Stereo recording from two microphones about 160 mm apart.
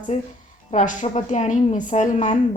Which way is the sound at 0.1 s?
45° left (ahead or behind).